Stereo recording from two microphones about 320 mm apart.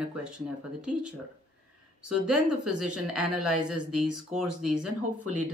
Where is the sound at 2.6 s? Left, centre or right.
Right.